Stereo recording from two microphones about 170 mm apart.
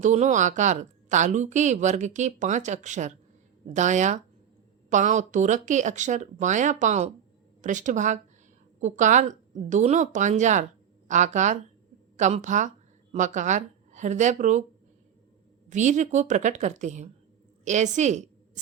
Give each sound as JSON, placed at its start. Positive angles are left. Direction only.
{"t": 0.0, "sound": "a woman's voice", "side_deg": -45}
{"t": 15.7, "sound": "a woman's voice", "side_deg": -45}